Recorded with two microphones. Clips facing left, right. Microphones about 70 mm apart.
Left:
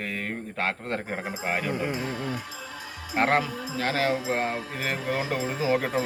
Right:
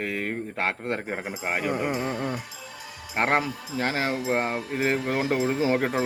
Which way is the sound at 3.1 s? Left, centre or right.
Right.